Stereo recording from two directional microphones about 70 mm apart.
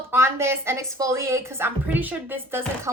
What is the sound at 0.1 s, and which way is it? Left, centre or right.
Speech, right.